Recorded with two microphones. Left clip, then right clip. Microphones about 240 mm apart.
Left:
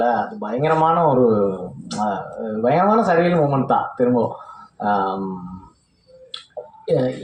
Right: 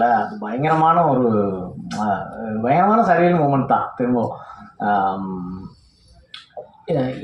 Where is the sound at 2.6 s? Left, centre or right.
Left.